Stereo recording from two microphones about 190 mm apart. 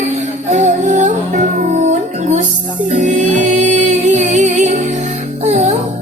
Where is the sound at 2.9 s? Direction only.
40° right (ahead or behind).